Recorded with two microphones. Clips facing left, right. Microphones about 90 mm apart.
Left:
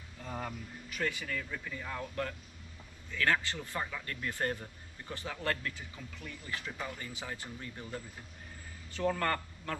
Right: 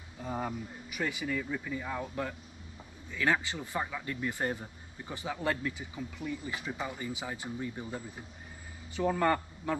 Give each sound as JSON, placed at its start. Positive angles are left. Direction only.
{"t": 0.2, "sound": "speech", "side_deg": -15}